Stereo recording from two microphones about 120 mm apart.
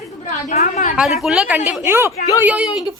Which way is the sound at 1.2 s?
5° right (ahead or behind).